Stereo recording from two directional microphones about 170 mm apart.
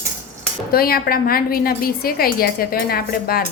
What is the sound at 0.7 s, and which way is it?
A woman's voice, 60° left (ahead or behind).